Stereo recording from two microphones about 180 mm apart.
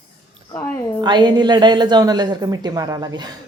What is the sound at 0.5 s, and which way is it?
Speech, 10° left (ahead or behind).